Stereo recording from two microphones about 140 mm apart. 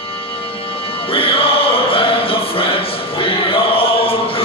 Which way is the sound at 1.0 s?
40° left (ahead or behind).